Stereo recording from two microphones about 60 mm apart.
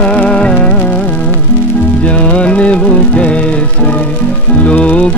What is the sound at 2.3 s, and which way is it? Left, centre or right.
Music, centre.